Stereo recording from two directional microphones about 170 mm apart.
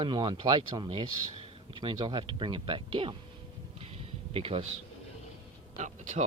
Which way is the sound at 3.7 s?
35° right (ahead or behind).